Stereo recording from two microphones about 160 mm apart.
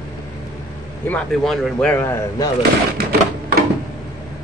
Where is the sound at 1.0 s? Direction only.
5° left (ahead or behind).